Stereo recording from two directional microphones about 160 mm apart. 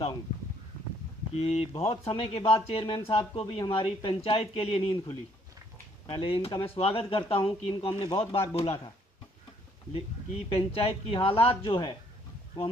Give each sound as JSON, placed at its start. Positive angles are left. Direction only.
{"t": 1.4, "sound": "speech", "side_deg": 40}
{"t": 9.9, "sound": "speech", "side_deg": 40}